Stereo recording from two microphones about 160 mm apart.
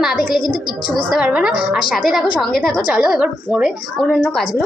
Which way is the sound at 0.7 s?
30° left (ahead or behind).